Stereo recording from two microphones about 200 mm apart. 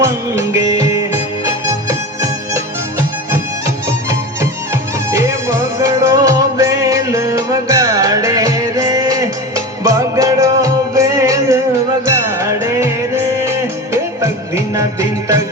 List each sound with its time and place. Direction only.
0.0 s music: 15° right (ahead or behind)
3.8 s music: 15° right (ahead or behind)
13.9 s music: 15° right (ahead or behind)